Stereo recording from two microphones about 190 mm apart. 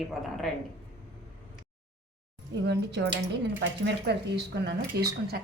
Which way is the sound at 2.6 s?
65° right (ahead or behind).